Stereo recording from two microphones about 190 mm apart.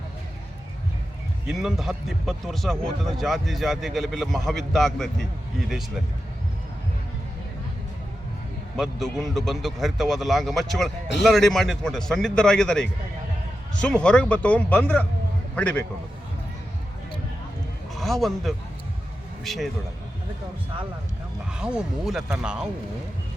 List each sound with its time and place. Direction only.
1.5 s speech: centre (ahead or behind)
8.7 s speech: centre (ahead or behind)
17.9 s speech: centre (ahead or behind)
21.5 s speech: 5° right (ahead or behind)